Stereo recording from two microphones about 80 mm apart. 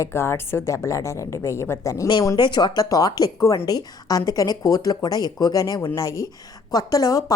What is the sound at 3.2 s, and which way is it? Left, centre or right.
A woman's voice, left.